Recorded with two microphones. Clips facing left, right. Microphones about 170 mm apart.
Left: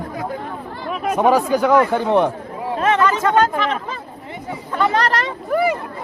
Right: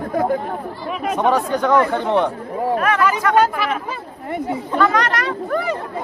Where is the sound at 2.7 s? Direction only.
25° left (ahead or behind).